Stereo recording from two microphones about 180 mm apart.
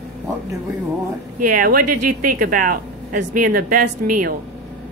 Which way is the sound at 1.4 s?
50° right (ahead or behind).